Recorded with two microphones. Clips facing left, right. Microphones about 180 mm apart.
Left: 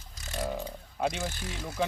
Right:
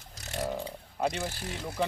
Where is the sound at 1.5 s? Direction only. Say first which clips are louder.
Right 1 dB; centre (ahead or behind).